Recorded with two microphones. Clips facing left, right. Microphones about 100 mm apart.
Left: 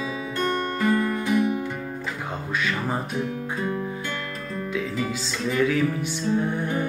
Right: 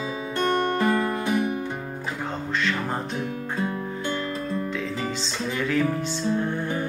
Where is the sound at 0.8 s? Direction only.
30° right (ahead or behind).